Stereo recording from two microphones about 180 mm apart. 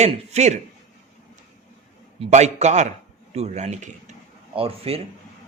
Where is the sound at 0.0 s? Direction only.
40° right (ahead or behind).